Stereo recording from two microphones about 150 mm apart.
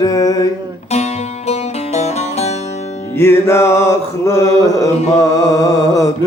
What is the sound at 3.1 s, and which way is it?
Mantra, 15° left (ahead or behind).